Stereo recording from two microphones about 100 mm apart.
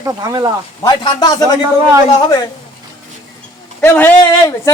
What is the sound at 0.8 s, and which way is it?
A man's voice, 50° left (ahead or behind).